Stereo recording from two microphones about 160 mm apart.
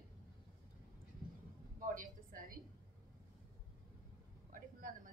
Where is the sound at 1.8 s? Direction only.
60° right (ahead or behind).